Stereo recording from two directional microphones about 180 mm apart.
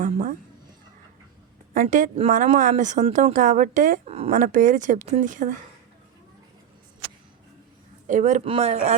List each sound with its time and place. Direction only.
0.0 s a sound: 45° right (ahead or behind)
1.7 s a woman's voice: 45° right (ahead or behind)
8.0 s speech: 45° right (ahead or behind)